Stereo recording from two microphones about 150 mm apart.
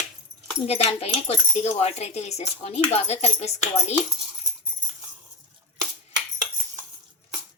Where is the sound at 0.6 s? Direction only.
40° left (ahead or behind).